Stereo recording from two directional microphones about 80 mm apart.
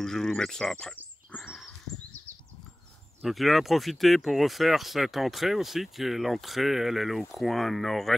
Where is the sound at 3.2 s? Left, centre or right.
Centre.